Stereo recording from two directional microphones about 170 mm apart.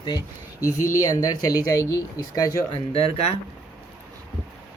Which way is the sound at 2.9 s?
35° left (ahead or behind).